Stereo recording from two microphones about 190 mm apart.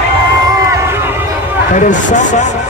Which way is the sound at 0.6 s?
15° right (ahead or behind).